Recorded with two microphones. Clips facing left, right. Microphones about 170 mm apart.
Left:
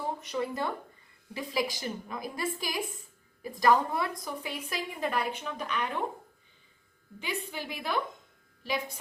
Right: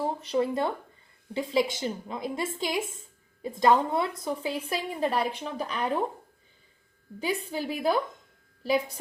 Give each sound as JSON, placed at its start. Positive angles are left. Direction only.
{"t": 0.0, "sound": "a woman's voice", "side_deg": -30}
{"t": 7.4, "sound": "speech", "side_deg": -35}